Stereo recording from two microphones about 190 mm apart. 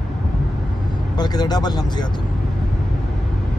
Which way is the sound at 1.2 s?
20° left (ahead or behind).